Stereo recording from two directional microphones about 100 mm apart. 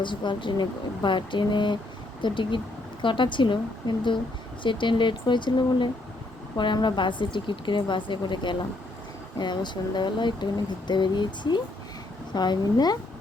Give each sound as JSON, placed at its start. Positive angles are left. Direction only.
{"t": 0.0, "sound": "speech", "side_deg": 50}